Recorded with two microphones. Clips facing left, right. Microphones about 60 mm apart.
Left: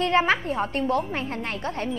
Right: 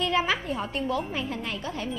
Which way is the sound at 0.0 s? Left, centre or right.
Left.